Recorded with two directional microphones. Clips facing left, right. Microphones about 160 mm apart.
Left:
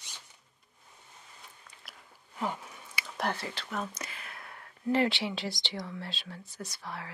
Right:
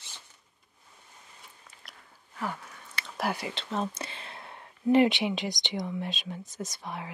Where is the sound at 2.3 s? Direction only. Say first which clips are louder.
Left 1 dB; 20° left (ahead or behind).